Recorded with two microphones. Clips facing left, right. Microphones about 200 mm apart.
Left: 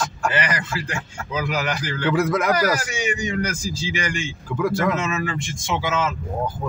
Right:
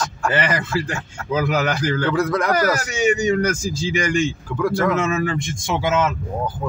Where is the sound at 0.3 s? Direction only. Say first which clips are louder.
Right 4 dB; 45° right (ahead or behind).